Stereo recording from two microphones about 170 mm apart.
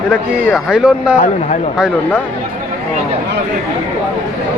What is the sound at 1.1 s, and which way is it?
Speech, 50° left (ahead or behind).